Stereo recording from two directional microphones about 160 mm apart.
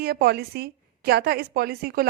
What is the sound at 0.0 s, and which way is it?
A woman's voice, 75° right (ahead or behind).